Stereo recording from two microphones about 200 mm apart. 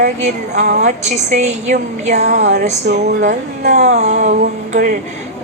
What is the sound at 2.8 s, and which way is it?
A woman's voice, 50° right (ahead or behind).